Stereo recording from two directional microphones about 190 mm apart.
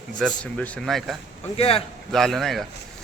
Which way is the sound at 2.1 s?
Centre (ahead or behind).